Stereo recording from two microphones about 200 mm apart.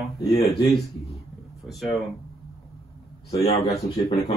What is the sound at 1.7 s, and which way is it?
Speech, centre (ahead or behind).